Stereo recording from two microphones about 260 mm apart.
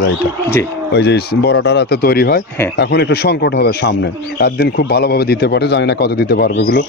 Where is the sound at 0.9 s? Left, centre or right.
Left.